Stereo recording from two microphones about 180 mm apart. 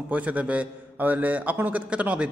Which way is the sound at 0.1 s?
10° right (ahead or behind).